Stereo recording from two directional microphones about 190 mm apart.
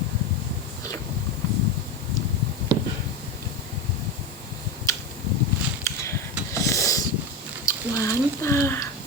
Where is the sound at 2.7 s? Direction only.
25° right (ahead or behind).